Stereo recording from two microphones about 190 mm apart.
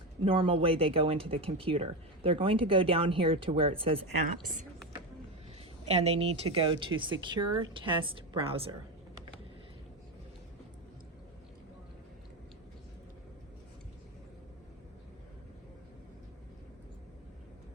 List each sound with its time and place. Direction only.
0.3 s speech: 25° right (ahead or behind)
6.0 s speech: 30° right (ahead or behind)